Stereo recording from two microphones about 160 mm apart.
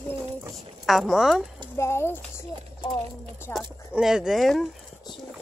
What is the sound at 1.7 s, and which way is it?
Speech, 15° left (ahead or behind).